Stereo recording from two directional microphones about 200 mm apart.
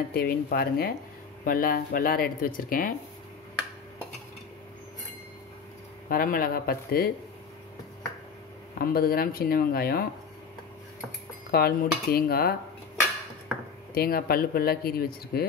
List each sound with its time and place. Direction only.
0.1 s speech: 50° left (ahead or behind)
6.0 s speech: 45° left (ahead or behind)
8.7 s speech: 50° left (ahead or behind)
11.5 s speech: 50° left (ahead or behind)
13.9 s speech: 50° left (ahead or behind)